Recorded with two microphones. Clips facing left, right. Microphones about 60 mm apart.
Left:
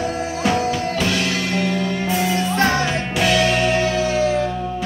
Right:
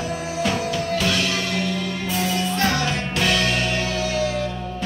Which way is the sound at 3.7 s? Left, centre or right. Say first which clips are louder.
Left 5 dB; left.